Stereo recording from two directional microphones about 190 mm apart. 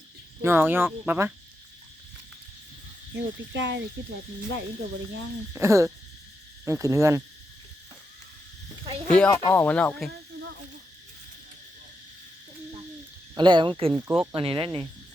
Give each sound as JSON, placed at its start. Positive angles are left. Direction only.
{"t": 0.4, "sound": "speech", "side_deg": -10}
{"t": 3.2, "sound": "speech", "side_deg": -70}
{"t": 5.5, "sound": "speech", "side_deg": -15}
{"t": 9.0, "sound": "speech", "side_deg": 5}
{"t": 13.3, "sound": "speech", "side_deg": -25}
{"t": 13.9, "sound": "speech", "side_deg": -5}
{"t": 14.3, "sound": "speech", "side_deg": -25}